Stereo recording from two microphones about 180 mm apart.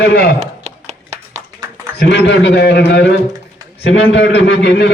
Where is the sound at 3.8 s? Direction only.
85° left.